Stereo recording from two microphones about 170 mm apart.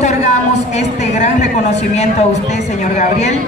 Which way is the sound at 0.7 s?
45° left (ahead or behind).